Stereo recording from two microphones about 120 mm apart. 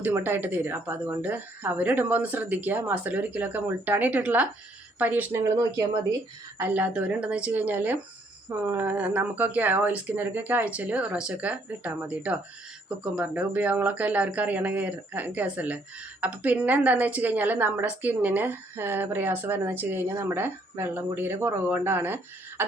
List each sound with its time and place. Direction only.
0.0 s speech: 15° right (ahead or behind)
5.4 s speech: 25° right (ahead or behind)
6.6 s speech: 15° right (ahead or behind)